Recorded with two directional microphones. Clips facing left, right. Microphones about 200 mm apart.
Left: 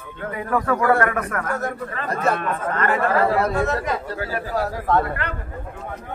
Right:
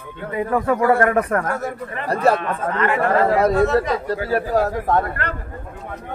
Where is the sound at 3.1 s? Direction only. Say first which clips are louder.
Right 5 dB; 40° right (ahead or behind).